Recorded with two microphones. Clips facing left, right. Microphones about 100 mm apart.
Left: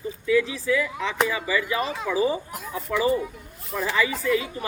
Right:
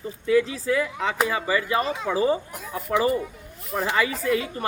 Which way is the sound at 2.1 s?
45° right (ahead or behind).